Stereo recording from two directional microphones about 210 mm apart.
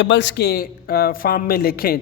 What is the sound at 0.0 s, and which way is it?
A woman's voice, 60° left (ahead or behind).